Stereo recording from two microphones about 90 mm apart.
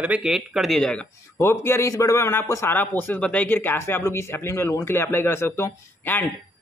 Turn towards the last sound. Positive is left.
turn(degrees=25)  # may be behind; listen again after turning